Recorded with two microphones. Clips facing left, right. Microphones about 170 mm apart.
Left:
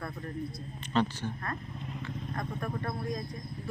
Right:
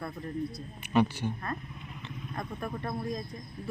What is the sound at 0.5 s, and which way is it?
Speech, 10° right (ahead or behind).